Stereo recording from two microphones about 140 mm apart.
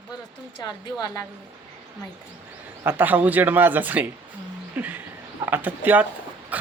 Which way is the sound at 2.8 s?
15° right (ahead or behind).